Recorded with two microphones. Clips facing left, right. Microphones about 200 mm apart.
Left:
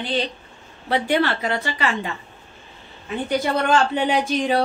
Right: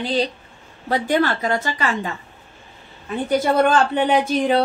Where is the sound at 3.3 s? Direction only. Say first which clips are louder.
Right 3 dB; 50° right (ahead or behind).